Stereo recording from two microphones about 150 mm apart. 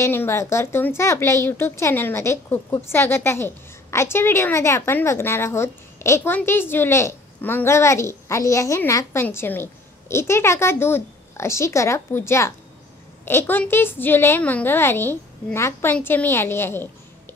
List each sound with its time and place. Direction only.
0.0 s a woman's voice: 15° left (ahead or behind)